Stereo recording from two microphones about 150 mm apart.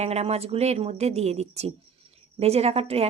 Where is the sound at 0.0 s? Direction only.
45° right (ahead or behind).